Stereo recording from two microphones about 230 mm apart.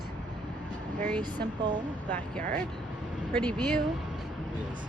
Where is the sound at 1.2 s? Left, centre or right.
Centre.